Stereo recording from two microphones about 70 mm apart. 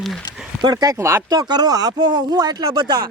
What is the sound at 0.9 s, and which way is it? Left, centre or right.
Speech, right.